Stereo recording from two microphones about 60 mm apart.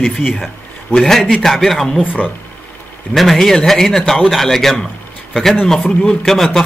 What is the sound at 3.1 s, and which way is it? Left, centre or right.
A man's voice, centre.